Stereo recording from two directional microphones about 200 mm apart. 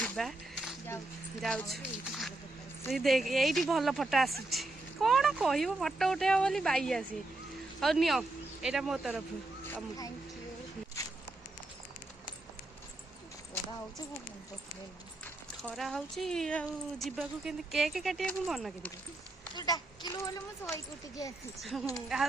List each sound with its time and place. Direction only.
0.0 s a sound: centre (ahead or behind)
1.4 s speech: 5° left (ahead or behind)
15.6 s speech: centre (ahead or behind)
19.5 s speech: 20° left (ahead or behind)
21.6 s speech: centre (ahead or behind)